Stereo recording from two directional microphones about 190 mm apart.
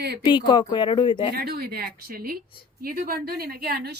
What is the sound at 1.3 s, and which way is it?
A woman's voice, 55° right (ahead or behind).